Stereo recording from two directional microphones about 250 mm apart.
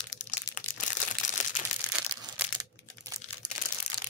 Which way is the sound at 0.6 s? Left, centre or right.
Left.